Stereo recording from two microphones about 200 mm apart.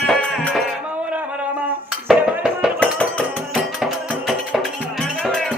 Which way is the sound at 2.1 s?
Centre (ahead or behind).